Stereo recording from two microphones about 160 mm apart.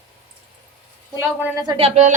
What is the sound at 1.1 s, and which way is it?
Speech, 10° right (ahead or behind).